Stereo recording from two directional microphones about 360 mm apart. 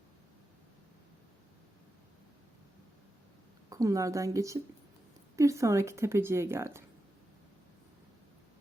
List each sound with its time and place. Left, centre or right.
3.7 s a woman's voice: centre